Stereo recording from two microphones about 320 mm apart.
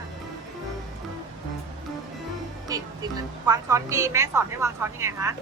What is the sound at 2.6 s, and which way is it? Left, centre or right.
Music, centre.